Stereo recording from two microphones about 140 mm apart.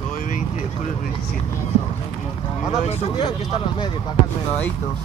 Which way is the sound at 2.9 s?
45° left (ahead or behind).